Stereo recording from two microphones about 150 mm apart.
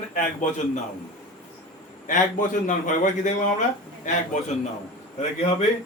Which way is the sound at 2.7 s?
55° left (ahead or behind).